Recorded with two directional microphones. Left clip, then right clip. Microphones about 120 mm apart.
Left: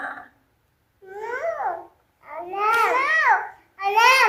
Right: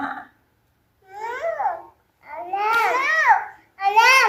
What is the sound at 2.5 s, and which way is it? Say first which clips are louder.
Babbling: even; 25° left (ahead or behind).